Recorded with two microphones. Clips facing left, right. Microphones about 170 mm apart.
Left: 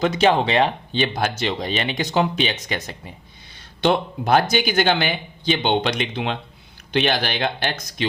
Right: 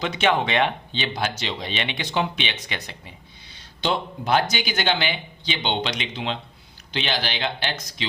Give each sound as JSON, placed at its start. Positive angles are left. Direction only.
{"t": 0.0, "sound": "speech", "side_deg": 40}